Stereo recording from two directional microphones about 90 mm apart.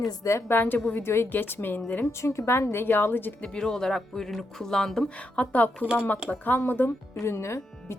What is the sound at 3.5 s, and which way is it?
A woman's voice, 5° left (ahead or behind).